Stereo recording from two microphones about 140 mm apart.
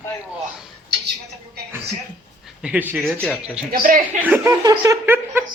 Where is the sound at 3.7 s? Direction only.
80° right.